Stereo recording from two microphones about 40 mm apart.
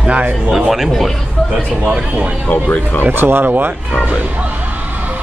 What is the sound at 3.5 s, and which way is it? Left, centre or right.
Speech, right.